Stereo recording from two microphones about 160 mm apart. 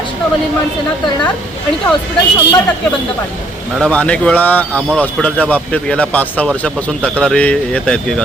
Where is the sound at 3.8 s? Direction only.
10° left (ahead or behind).